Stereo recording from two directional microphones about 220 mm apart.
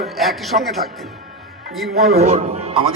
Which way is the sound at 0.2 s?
Centre (ahead or behind).